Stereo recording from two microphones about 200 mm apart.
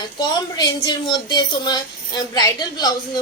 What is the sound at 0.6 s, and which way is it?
Speech, 20° left (ahead or behind).